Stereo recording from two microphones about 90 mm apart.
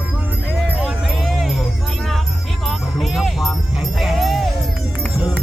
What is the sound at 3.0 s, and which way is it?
Music, centre (ahead or behind).